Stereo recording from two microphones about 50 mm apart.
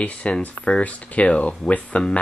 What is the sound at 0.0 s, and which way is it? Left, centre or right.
Speech, left.